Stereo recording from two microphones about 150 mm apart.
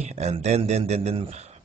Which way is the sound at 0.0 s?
50° right (ahead or behind).